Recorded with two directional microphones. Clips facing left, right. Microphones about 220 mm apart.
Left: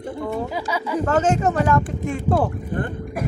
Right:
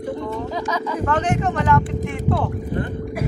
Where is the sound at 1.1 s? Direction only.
40° left (ahead or behind).